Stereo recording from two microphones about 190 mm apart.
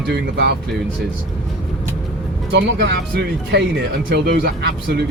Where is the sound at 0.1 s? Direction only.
60° right (ahead or behind).